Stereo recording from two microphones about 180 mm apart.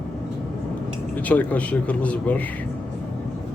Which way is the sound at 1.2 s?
10° left (ahead or behind).